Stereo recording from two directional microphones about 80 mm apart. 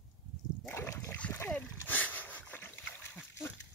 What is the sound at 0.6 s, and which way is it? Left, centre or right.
Splash, left.